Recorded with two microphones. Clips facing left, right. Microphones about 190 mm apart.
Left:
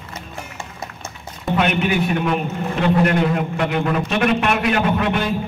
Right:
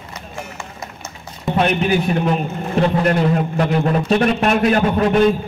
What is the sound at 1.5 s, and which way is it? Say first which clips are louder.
A man's voice: right 2 dB; 35° right (ahead or behind).